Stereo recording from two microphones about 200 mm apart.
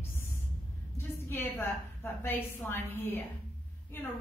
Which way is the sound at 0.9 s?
10° left (ahead or behind).